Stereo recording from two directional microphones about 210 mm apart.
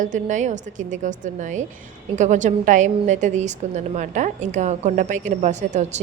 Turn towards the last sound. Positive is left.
turn(degrees=-35)  # may be behind; listen again after turning